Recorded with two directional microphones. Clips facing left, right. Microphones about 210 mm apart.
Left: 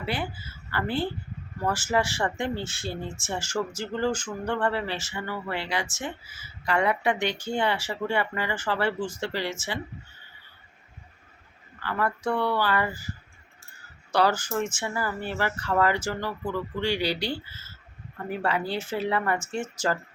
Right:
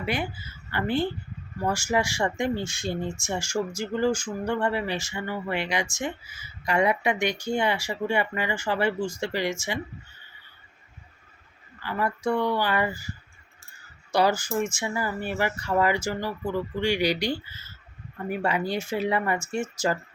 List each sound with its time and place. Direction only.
0.0 s speech: 15° right (ahead or behind)
11.8 s speech: 15° right (ahead or behind)
14.1 s speech: 10° right (ahead or behind)